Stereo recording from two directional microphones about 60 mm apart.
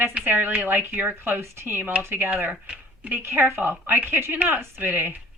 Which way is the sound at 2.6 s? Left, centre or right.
Right.